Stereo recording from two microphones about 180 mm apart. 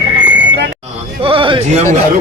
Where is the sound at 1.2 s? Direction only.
30° right (ahead or behind).